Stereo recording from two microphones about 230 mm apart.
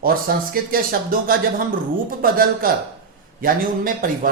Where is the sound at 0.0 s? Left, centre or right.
Right.